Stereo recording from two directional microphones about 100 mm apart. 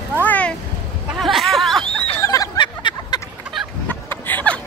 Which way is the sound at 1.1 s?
Centre (ahead or behind).